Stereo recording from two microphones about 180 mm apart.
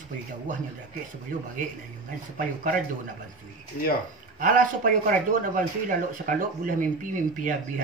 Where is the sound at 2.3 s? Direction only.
50° right (ahead or behind).